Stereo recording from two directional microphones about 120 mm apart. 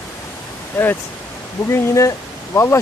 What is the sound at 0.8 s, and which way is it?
Speech, 20° left (ahead or behind).